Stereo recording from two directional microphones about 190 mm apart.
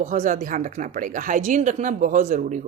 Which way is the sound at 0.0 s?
40° right (ahead or behind).